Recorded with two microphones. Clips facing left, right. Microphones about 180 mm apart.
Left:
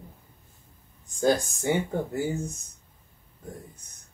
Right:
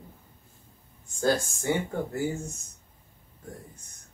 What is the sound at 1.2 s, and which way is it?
Speech, 15° left (ahead or behind).